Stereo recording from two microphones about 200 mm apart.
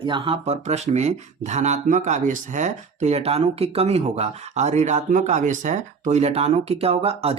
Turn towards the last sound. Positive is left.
turn(degrees=-30)  # may be behind; listen again after turning